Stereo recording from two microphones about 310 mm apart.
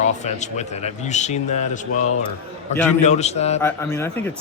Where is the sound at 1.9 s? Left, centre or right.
Left.